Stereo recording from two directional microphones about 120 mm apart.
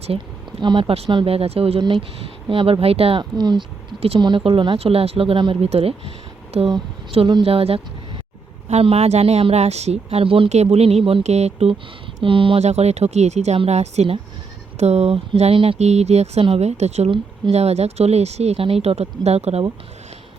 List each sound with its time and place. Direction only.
0.6 s a woman's voice: 45° right (ahead or behind)
10.5 s a woman's voice: 65° right (ahead or behind)
12.2 s speech: 45° right (ahead or behind)
12.6 s a woman's voice: 65° right (ahead or behind)
15.8 s a woman's voice: 65° right (ahead or behind)